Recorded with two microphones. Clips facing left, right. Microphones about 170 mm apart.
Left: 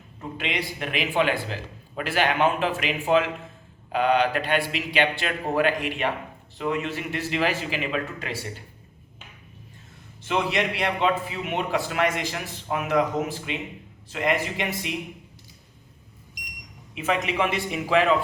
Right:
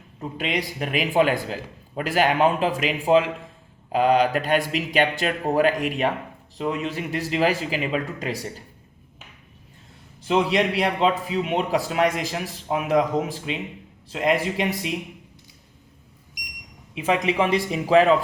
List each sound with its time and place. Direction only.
0.2 s speech: 35° right (ahead or behind)
10.2 s a man's voice: 30° right (ahead or behind)
16.9 s speech: 30° right (ahead or behind)